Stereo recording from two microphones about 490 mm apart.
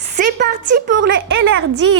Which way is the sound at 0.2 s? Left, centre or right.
Centre.